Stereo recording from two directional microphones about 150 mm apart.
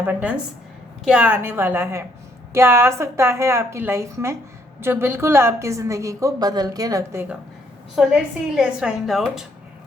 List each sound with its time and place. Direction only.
0.0 s a woman's voice: 10° right (ahead or behind)
7.9 s a woman's voice: 5° right (ahead or behind)